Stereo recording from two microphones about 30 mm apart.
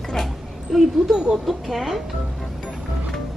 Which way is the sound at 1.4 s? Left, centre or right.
Centre.